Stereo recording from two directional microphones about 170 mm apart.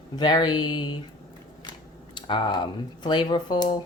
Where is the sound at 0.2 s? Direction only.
25° left (ahead or behind).